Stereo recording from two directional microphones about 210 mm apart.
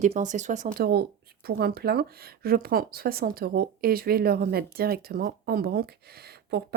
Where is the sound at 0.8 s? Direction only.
45° right (ahead or behind).